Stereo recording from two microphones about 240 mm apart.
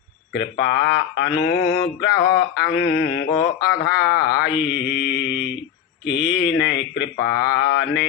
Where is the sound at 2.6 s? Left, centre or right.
Left.